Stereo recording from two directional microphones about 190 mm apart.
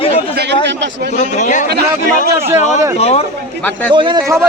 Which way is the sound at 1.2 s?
40° left (ahead or behind).